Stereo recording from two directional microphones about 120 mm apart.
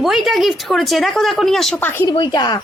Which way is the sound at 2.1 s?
40° left (ahead or behind).